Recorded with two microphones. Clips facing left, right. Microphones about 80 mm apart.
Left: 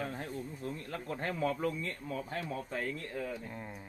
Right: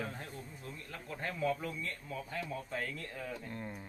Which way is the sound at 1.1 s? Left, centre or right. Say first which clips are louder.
Left 1 dB; left.